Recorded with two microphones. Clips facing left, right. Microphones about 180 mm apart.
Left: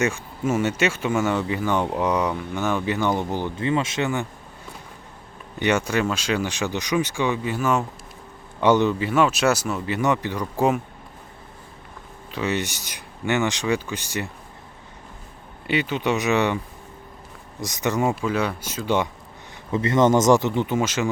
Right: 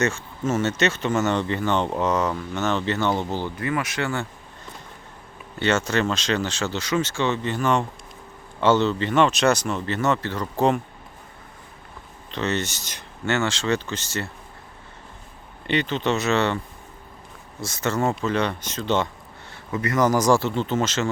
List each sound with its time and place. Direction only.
0.0 s speech: 15° left (ahead or behind)
12.3 s speech: 10° left (ahead or behind)
15.6 s speech: 5° left (ahead or behind)
17.6 s speech: 15° left (ahead or behind)
19.7 s speech: 25° left (ahead or behind)